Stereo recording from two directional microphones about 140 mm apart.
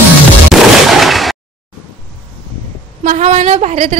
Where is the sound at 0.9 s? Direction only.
Centre (ahead or behind).